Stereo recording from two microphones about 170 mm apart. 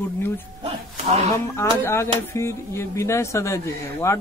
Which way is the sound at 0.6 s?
35° right (ahead or behind).